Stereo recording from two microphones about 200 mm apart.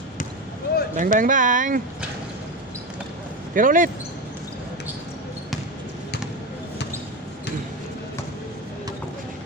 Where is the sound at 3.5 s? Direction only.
45° right (ahead or behind).